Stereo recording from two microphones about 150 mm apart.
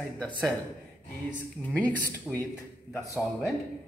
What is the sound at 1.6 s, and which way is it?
Speech, 10° left (ahead or behind).